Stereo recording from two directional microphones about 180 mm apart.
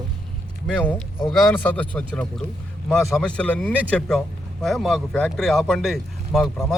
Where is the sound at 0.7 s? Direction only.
5° left (ahead or behind).